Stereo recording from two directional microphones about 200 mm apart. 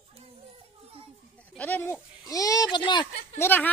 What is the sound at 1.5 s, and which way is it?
A woman's voice, 10° left (ahead or behind).